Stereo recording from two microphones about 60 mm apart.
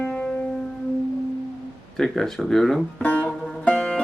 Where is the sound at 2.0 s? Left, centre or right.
Centre.